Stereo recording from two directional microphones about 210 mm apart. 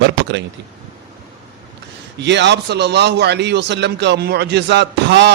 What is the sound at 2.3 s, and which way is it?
A man's voice, 55° right (ahead or behind).